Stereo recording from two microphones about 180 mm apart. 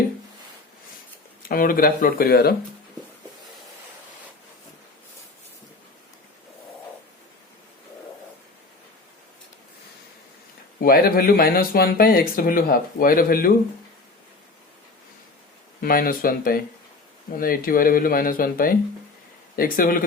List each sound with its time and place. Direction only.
1.4 s speech: 50° left (ahead or behind)
10.8 s speech: 55° left (ahead or behind)
15.8 s speech: 55° left (ahead or behind)